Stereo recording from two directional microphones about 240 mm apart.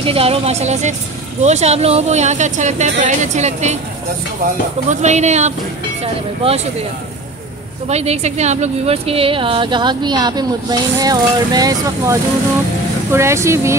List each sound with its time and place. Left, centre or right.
0.0 s a woman's voice: right
4.8 s a woman's voice: right
7.9 s a woman's voice: right; by 13.7 s centre